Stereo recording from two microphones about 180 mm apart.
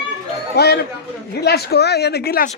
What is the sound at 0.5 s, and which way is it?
Speech, 65° left (ahead or behind).